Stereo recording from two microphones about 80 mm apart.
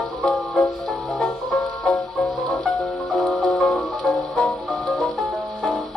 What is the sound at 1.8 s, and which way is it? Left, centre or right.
Music, centre.